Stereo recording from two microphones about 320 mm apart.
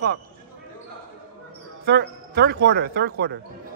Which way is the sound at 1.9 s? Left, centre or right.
Right.